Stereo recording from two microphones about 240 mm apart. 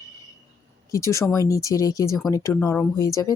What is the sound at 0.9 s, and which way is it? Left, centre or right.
Speech, centre.